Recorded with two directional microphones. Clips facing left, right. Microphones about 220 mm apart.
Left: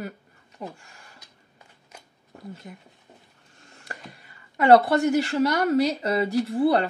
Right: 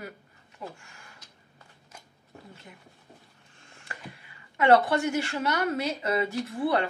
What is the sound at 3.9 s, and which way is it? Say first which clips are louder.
A woman's voice: left 2 dB; 40° left (ahead or behind).